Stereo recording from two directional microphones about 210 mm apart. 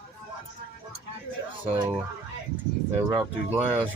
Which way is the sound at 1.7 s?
10° right (ahead or behind).